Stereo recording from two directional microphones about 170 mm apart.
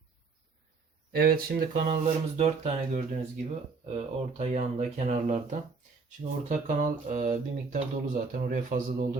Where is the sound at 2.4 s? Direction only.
40° right (ahead or behind); by 9.0 s 55° right (ahead or behind).